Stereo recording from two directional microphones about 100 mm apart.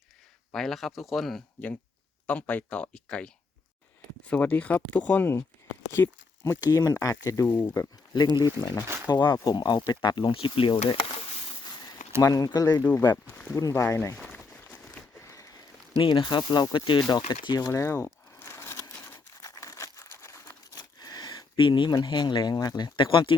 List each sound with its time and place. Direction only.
0.5 s speech: centre (ahead or behind)
2.2 s speech: 15° left (ahead or behind)
8.4 s speech: 40° left (ahead or behind); by 11.2 s 55° left (ahead or behind)
11.7 s a sound: 45° left (ahead or behind)
12.2 s speech: 35° left (ahead or behind)
14.7 s a sound: 10° left (ahead or behind)
15.2 s a sound: 30° left (ahead or behind)
16.0 s speech: 55° left (ahead or behind)
17.7 s crumpling: 30° left (ahead or behind)
20.7 s a sound: 40° left (ahead or behind)
21.6 s speech: 50° left (ahead or behind)
23.0 s speech: 60° left (ahead or behind)